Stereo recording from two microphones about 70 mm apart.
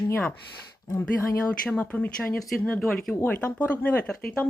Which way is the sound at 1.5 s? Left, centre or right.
Centre.